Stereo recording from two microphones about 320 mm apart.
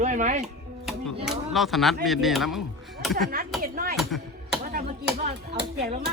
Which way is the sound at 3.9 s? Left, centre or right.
Centre.